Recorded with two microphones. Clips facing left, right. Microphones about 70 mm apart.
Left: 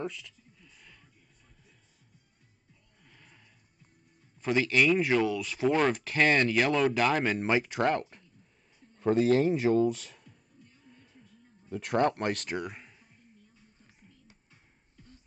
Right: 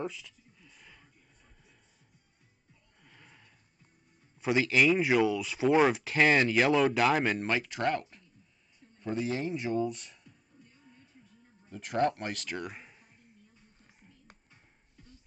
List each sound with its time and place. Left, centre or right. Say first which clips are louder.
0.0 s a sound: even; centre
3.0 s neigh: right 1 dB; centre
4.4 s speech: even; centre
7.4 s speech: left 4 dB; centre
9.0 s a man's voice: left 9 dB; left
11.7 s a man's voice: left 2 dB; left
12.6 s a sound: left 1 dB; centre